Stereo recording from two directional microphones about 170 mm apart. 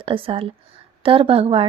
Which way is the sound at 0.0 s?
30° right (ahead or behind).